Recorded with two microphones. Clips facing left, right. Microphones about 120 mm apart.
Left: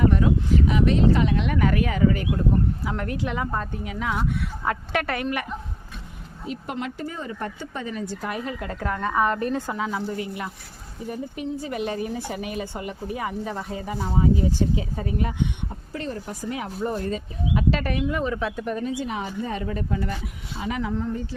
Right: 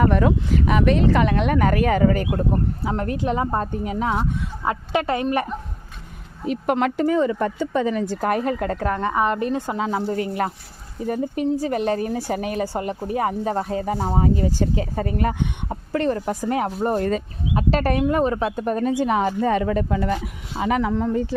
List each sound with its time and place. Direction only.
0.0 s speech: 70° right (ahead or behind); by 5.5 s 30° right (ahead or behind)
6.5 s speech: 65° right (ahead or behind); by 7.3 s 90° right
8.2 s a woman's voice: 50° right (ahead or behind)
17.0 s speech: 65° right (ahead or behind)
17.5 s a woman's voice: 40° right (ahead or behind); by 20.0 s 90° right
20.6 s speech: 70° right (ahead or behind); by 21.2 s 90° right